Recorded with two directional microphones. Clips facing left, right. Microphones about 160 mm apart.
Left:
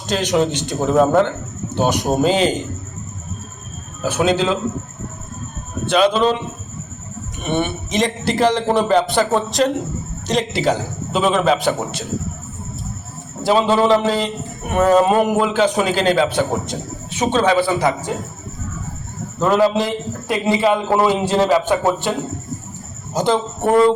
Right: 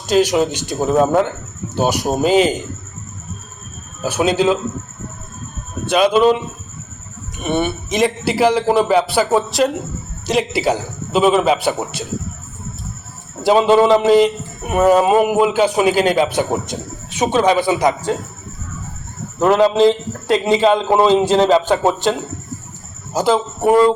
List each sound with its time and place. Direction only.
0.1 s speech: 10° right (ahead or behind)
4.0 s speech: 10° right (ahead or behind)
5.8 s speech: 10° right (ahead or behind)
7.4 s speech: 5° right (ahead or behind)
13.4 s speech: 15° right (ahead or behind)
19.4 s a man's voice: 20° right (ahead or behind)
23.1 s speech: 5° right (ahead or behind)